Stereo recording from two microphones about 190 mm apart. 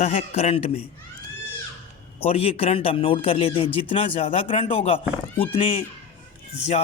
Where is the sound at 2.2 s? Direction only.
30° left (ahead or behind).